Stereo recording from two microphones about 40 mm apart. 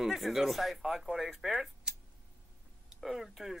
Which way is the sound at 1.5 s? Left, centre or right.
Centre.